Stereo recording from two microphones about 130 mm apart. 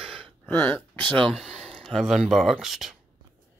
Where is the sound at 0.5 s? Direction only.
10° left (ahead or behind).